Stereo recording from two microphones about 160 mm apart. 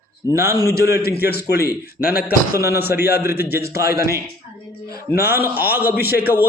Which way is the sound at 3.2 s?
15° right (ahead or behind).